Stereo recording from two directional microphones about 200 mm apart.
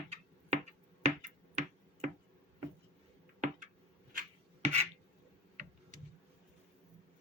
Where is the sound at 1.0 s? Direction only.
35° right (ahead or behind).